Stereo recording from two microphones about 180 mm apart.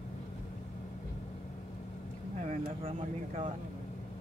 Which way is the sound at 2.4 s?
30° right (ahead or behind).